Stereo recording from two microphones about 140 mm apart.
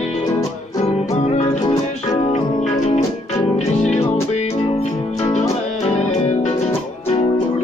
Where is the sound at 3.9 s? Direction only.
50° left (ahead or behind).